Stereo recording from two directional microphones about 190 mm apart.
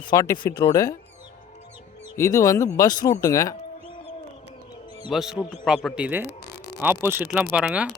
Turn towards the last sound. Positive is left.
turn(degrees=-5)  # may be behind; listen again after turning